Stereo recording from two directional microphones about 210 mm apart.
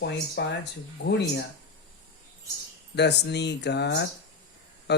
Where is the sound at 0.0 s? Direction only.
55° left (ahead or behind).